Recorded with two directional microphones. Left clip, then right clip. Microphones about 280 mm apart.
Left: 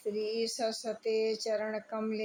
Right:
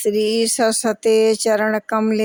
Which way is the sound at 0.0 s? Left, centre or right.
Right.